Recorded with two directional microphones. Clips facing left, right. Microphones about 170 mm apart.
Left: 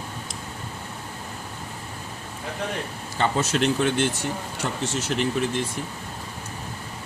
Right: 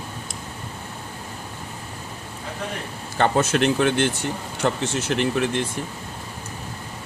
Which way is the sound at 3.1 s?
60° right (ahead or behind).